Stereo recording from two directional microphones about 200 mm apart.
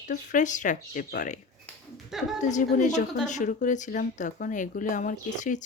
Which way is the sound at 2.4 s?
40° left (ahead or behind).